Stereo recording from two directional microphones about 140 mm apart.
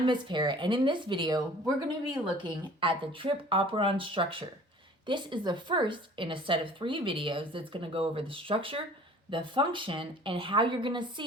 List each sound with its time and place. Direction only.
0.0 s speech: 35° right (ahead or behind)